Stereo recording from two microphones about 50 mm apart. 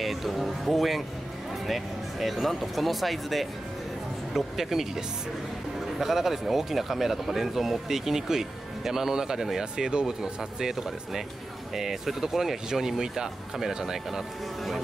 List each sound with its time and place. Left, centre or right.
0.0 s speech: centre